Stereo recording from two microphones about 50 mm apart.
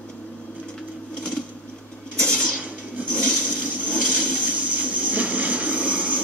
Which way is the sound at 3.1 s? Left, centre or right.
Centre.